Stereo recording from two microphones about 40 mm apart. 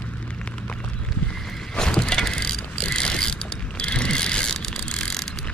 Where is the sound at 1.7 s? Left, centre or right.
Centre.